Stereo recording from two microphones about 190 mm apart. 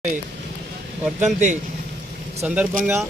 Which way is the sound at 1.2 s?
40° right (ahead or behind).